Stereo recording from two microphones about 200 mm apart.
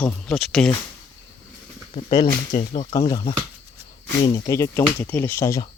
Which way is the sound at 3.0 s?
20° left (ahead or behind).